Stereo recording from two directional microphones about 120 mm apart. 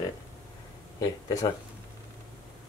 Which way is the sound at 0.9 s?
30° left (ahead or behind).